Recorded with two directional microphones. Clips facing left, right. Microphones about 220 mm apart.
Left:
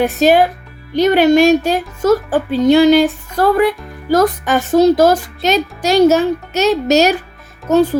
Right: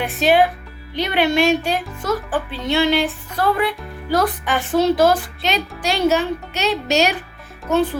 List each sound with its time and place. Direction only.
0.0 s speech: 40° left (ahead or behind)